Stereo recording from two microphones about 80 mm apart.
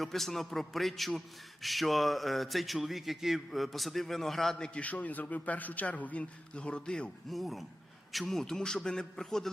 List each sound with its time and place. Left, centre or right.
0.0 s speech: centre